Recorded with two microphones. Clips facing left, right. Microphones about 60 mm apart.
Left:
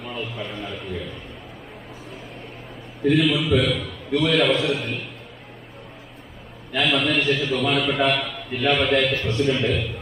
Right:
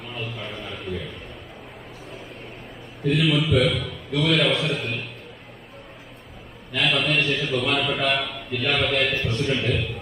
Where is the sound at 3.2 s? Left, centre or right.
Centre.